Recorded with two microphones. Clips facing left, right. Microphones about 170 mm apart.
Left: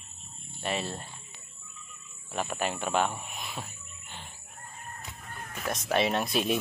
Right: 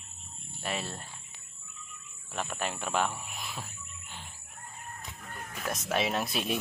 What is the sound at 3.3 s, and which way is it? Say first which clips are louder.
Bird: left 2 dB; centre (ahead or behind).